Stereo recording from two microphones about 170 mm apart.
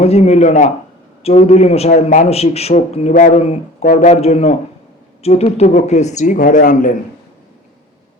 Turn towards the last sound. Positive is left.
turn(degrees=50)  # may be behind; listen again after turning